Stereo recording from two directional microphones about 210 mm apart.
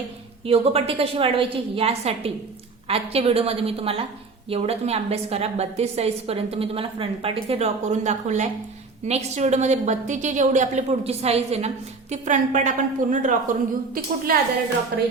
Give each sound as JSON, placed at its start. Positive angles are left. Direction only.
{"t": 0.4, "sound": "a woman's voice", "side_deg": -30}